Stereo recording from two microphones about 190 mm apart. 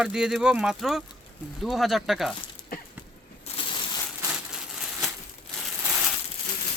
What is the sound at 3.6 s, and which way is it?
Crushing, 25° left (ahead or behind).